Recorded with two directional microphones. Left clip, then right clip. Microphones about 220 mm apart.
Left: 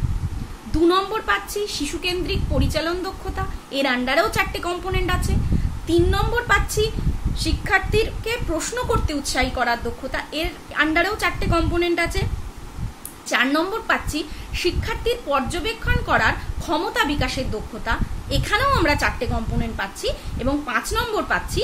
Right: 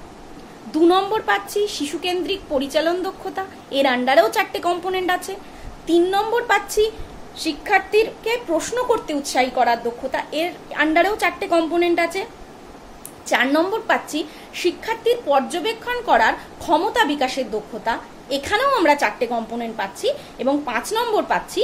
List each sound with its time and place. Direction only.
0.8 s a woman's voice: 5° left (ahead or behind)
13.3 s a woman's voice: 5° left (ahead or behind)